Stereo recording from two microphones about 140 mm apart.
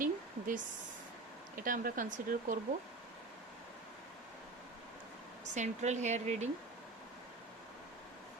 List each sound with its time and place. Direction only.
0.0 s a sound: 75° right (ahead or behind)
1.5 s speech: 80° right
5.5 s speech: 55° right (ahead or behind)